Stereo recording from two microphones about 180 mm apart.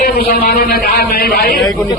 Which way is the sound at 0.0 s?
55° left (ahead or behind).